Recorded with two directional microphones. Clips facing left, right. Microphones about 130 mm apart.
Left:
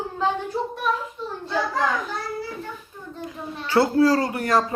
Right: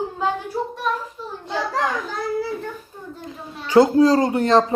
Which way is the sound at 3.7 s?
20° right (ahead or behind).